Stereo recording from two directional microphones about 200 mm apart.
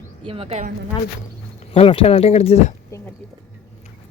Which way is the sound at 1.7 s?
30° left (ahead or behind).